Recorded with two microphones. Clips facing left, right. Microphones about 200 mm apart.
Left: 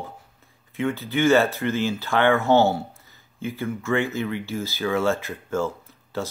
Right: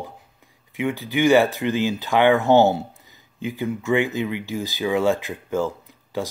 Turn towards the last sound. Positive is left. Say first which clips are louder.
# right 2 dB
turn(degrees=-15)  # may be behind; listen again after turning